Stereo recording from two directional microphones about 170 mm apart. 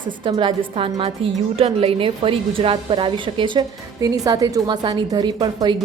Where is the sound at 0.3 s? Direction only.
30° right (ahead or behind).